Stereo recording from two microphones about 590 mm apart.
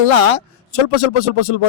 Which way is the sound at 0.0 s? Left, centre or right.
Left.